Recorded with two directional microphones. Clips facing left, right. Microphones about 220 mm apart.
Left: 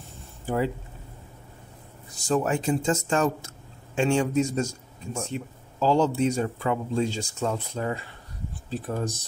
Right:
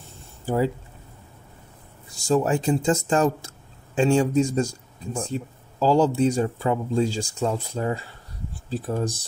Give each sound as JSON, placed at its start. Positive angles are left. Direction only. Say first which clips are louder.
{"t": 2.3, "sound": "speech", "louder": "right 3 dB", "side_deg": -30}